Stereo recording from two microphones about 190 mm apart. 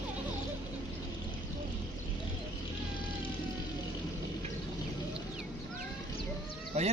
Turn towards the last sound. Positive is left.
turn(degrees=-35)  # may be behind; listen again after turning